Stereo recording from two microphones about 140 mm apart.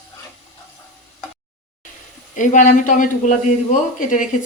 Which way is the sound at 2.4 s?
65° left (ahead or behind).